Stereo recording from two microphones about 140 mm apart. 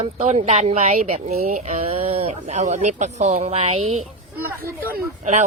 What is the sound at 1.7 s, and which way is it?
Speech, 45° right (ahead or behind).